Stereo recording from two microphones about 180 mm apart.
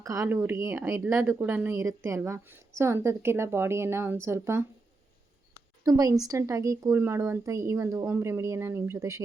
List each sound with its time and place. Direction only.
0.0 s speech: 15° right (ahead or behind)
5.8 s speech: 20° right (ahead or behind)